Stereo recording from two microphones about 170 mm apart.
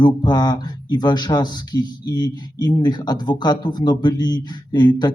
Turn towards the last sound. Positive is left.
turn(degrees=25)  # may be behind; listen again after turning